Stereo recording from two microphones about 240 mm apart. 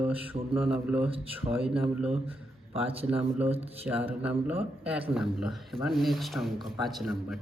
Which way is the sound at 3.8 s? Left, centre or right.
Centre.